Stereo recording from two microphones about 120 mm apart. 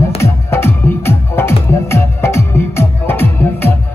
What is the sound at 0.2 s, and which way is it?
Music, 20° left (ahead or behind).